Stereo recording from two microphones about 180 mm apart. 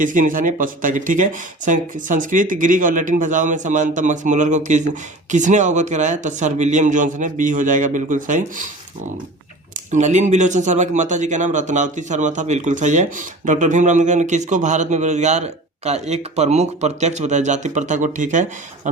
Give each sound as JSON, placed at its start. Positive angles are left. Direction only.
{"t": 0.0, "sound": "speech", "side_deg": -50}
{"t": 9.9, "sound": "a man's voice", "side_deg": -40}